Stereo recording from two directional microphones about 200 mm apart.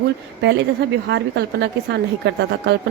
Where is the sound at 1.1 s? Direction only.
60° right (ahead or behind).